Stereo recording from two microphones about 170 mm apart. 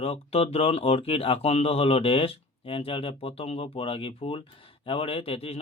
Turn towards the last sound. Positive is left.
turn(degrees=35)  # may be behind; listen again after turning